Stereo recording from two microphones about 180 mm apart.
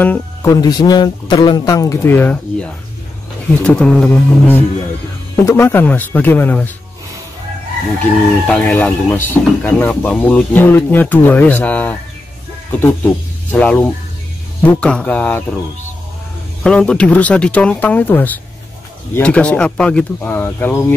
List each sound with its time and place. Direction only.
0.0 s speech: 10° left (ahead or behind)
8.0 s speech: 10° left (ahead or behind)
13.5 s speech: 10° left (ahead or behind)
16.6 s speech: 5° left (ahead or behind)